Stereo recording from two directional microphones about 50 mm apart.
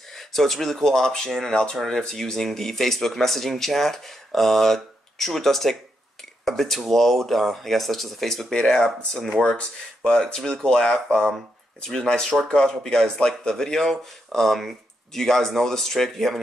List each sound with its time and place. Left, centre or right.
0.1 s speech: centre
9.4 s speech: left